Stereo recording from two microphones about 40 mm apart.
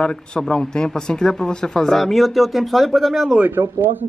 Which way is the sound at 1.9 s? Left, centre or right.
Centre.